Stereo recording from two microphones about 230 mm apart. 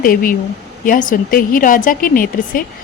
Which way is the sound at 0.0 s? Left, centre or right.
Left.